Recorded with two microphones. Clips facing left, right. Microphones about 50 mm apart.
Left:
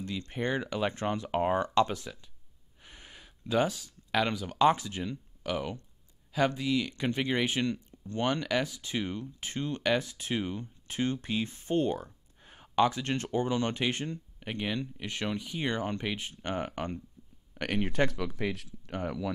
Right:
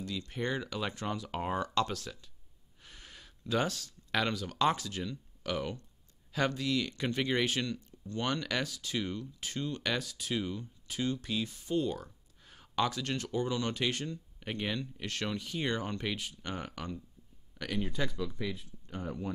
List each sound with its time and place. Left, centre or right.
0.3 s speech: left
0.9 s speech: left
2.8 s a sound: centre
4.3 s speech: centre
5.4 s speech: centre; by 12.0 s left
12.0 s speech: left
14.4 s speech: centre
16.2 s speech: left
17.6 s speech: left
18.1 s speech: left